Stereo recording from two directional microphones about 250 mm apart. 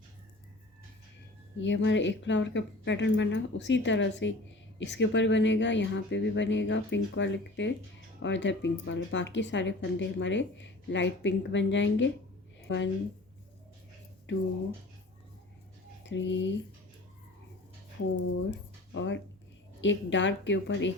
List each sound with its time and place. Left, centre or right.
1.5 s a woman's voice: left
16.0 s speech: left
18.9 s speech: left